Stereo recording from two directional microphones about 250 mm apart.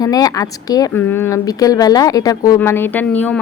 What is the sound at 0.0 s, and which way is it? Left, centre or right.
Speech, centre.